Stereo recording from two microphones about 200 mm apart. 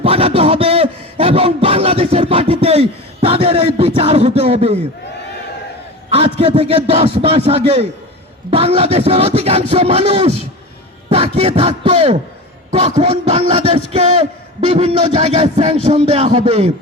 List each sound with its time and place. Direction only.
0.0 s speech: 30° right (ahead or behind)
1.2 s a sound: 30° right (ahead or behind)
6.4 s a man's voice: 30° right (ahead or behind)